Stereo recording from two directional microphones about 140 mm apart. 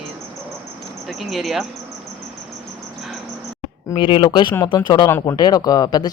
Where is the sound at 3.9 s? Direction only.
35° left (ahead or behind).